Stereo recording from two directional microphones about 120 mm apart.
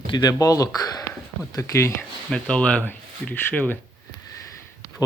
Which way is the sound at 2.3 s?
10° left (ahead or behind).